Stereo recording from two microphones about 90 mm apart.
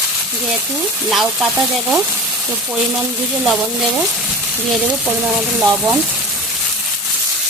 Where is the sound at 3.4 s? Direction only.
5° right (ahead or behind).